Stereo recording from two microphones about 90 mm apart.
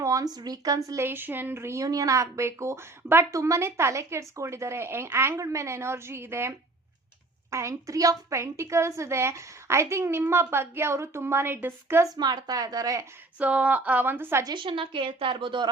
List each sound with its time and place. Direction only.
0.0 s a child's voice: 40° right (ahead or behind)
1.0 s a woman's voice: 25° right (ahead or behind)
1.8 s a child's voice: 40° right (ahead or behind); by 12.0 s 25° right (ahead or behind)
12.0 s a woman's voice: 45° right (ahead or behind)
13.4 s a woman's voice: 15° right (ahead or behind)
14.4 s a woman's voice: 60° right (ahead or behind)